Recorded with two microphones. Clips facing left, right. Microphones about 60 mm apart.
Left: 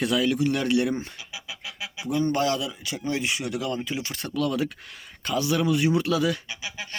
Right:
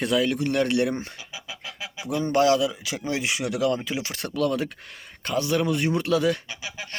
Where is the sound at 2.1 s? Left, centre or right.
Right.